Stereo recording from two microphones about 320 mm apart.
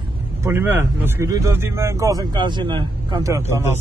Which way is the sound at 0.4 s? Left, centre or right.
Centre.